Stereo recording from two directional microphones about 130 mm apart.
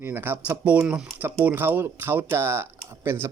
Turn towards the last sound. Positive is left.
turn(degrees=-20)  # may be behind; listen again after turning